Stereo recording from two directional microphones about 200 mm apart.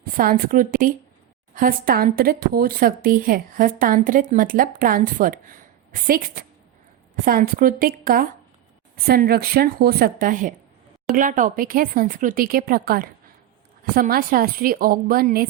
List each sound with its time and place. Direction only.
0.0 s speech: 45° right (ahead or behind)